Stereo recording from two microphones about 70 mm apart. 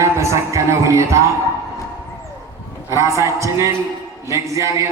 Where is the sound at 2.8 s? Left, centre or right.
Right.